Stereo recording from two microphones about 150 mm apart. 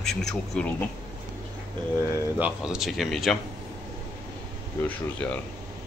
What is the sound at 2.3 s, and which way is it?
Speech, 5° right (ahead or behind).